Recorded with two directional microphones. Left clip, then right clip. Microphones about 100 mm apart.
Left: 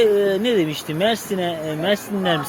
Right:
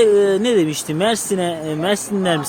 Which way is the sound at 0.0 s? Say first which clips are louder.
Right 3 dB; 90° right.